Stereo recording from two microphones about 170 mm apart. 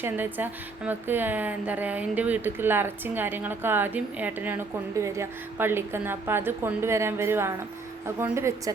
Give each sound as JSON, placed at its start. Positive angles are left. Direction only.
{"t": 0.0, "sound": "speech", "side_deg": -10}